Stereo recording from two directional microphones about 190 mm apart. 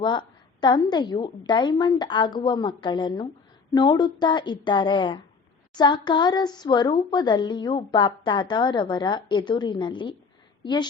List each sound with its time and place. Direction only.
0.0 s a woman's voice: 25° left (ahead or behind)